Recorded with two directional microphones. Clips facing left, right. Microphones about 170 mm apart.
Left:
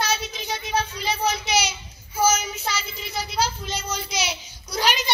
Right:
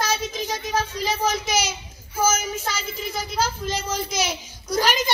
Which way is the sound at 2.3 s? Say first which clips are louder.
Even; 50° right (ahead or behind).